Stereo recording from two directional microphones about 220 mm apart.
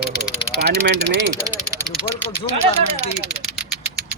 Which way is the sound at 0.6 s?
50° right (ahead or behind).